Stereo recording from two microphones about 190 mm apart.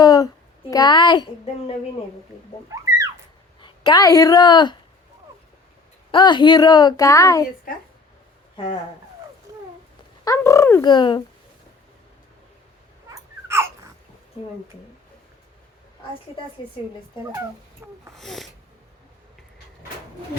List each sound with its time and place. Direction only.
0.0 s a sound: 20° left (ahead or behind)
0.7 s a woman's voice: 20° left (ahead or behind)
2.6 s a sound: 15° right (ahead or behind)
3.6 s a woman's voice: 20° left (ahead or behind)
6.1 s a woman's voice: 25° left (ahead or behind)
8.5 s speech: 25° left (ahead or behind)
10.2 s speech: 15° left (ahead or behind)
13.1 s crying: 15° right (ahead or behind)
16.6 s a woman's voice: 25° left (ahead or behind)
18.1 s speech: centre (ahead or behind)